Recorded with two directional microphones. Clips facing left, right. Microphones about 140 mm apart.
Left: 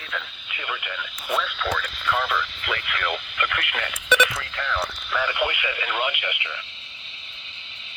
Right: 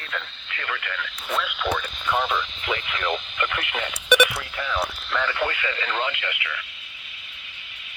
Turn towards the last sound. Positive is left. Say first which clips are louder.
# even
turn(degrees=25)  # may be behind; listen again after turning